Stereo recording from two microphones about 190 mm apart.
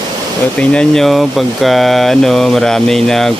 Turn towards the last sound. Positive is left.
turn(degrees=0)  # may be behind; listen again after turning